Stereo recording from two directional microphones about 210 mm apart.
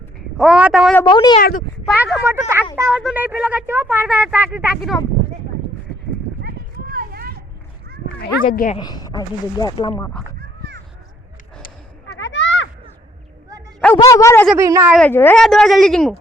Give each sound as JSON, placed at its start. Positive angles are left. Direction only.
{"t": 0.3, "sound": "speech", "side_deg": -5}
{"t": 1.0, "sound": "speech", "side_deg": 20}
{"t": 1.4, "sound": "speech", "side_deg": 40}
{"t": 2.0, "sound": "speech", "side_deg": 0}
{"t": 2.2, "sound": "speech", "side_deg": -10}
{"t": 6.9, "sound": "a sound", "side_deg": -45}
{"t": 8.2, "sound": "speech", "side_deg": 45}
{"t": 8.8, "sound": "speech", "side_deg": 20}
{"t": 9.9, "sound": "a man's voice", "side_deg": 10}
{"t": 12.0, "sound": "a sound", "side_deg": 60}
{"t": 13.8, "sound": "a man's voice", "side_deg": 15}
{"t": 14.5, "sound": "speech", "side_deg": -15}
{"t": 14.9, "sound": "speech", "side_deg": 10}